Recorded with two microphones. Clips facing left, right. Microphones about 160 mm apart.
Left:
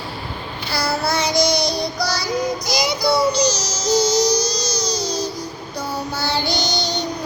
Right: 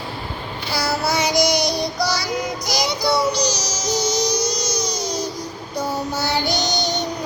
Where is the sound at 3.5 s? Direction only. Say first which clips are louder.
Left 3 dB; 15° right (ahead or behind).